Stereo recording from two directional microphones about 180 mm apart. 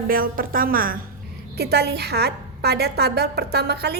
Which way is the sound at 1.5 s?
65° right (ahead or behind).